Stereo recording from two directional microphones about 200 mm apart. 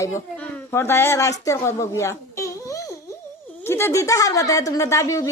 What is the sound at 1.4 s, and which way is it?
A woman's voice, 15° left (ahead or behind).